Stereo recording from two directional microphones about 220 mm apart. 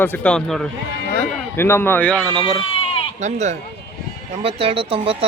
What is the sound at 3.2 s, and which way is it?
Speech, 30° right (ahead or behind).